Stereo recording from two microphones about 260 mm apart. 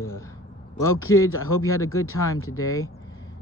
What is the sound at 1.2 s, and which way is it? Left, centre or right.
Speech, left.